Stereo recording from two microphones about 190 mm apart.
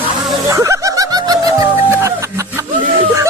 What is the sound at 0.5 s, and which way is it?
Music, 15° right (ahead or behind).